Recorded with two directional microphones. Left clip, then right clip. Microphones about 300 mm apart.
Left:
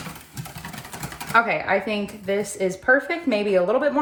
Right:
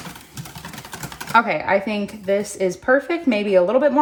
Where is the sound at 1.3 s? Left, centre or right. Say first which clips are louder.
Right 2 dB; right.